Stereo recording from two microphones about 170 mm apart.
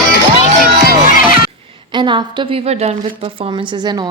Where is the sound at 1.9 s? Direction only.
25° right (ahead or behind).